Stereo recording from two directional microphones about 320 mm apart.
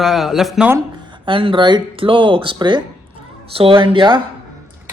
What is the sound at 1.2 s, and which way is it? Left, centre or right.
Speech, centre.